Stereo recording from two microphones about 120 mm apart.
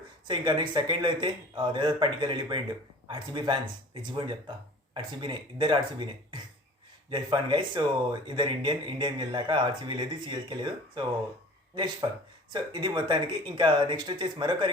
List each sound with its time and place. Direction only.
0.3 s speech: 40° right (ahead or behind)